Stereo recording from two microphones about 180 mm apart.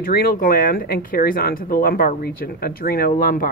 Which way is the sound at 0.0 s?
55° left (ahead or behind).